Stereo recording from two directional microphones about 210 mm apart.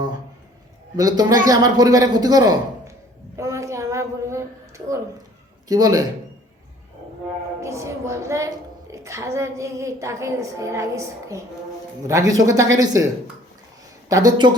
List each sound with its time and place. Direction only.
0.9 s a woman's voice: 15° right (ahead or behind)
3.3 s a sound: 15° right (ahead or behind)
5.6 s a woman's voice: 15° right (ahead or behind)
7.6 s a woman's voice: 15° right (ahead or behind)
14.1 s a woman's voice: 15° right (ahead or behind)